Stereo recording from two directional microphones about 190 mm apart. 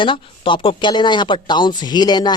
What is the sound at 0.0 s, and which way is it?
Speech, 25° left (ahead or behind).